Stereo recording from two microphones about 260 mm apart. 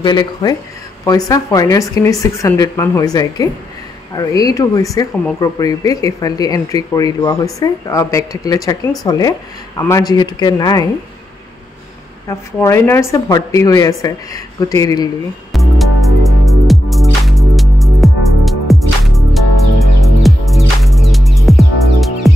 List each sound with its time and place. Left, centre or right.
0.0 s speech: centre
12.3 s speech: centre
15.5 s music: centre